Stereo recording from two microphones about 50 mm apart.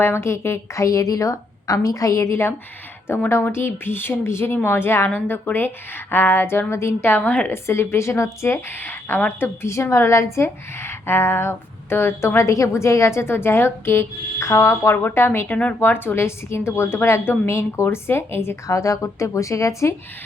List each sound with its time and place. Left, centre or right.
0.0 s a woman's voice: left
3.1 s a woman's voice: left
5.0 s a woman's voice: left
6.7 s a woman's voice: left
7.0 s a woman's voice: left
7.3 s a woman's voice: left
7.5 s a woman's voice: left
8.7 s a woman's voice: left
9.6 s a woman's voice: left
12.4 s a woman's voice: left
14.9 s a woman's voice: left
15.4 s speech: left
15.8 s a woman's voice: left